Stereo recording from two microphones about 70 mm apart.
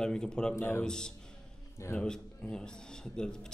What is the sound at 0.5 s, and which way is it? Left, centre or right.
Speech, left.